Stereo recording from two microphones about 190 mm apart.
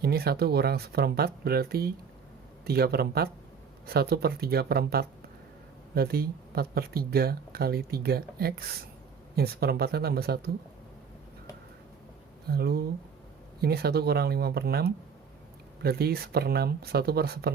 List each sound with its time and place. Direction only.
0.0 s speech: 55° right (ahead or behind)
12.5 s speech: 55° right (ahead or behind)